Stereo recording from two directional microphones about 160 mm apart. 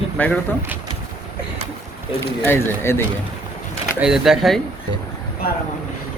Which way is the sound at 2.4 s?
15° left (ahead or behind).